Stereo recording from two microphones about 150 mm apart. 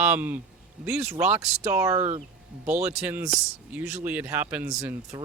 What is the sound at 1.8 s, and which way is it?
Speech, 20° right (ahead or behind).